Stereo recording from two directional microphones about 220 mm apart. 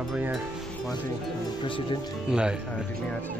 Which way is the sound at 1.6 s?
20° left (ahead or behind).